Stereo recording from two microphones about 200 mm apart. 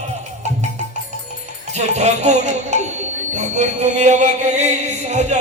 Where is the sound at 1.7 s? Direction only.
35° right (ahead or behind).